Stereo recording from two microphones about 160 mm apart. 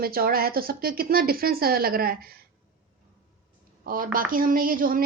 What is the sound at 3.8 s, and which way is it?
A woman's voice, 60° right (ahead or behind).